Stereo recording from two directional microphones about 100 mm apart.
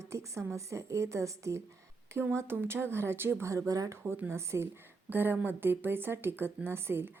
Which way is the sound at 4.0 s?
20° right (ahead or behind).